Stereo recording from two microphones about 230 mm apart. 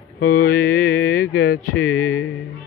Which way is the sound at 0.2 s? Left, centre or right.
Left.